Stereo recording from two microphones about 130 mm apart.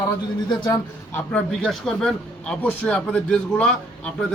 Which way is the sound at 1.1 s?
10° left (ahead or behind).